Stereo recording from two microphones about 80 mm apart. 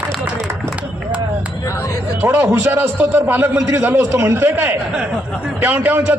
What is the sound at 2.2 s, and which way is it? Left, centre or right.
A man's voice, right.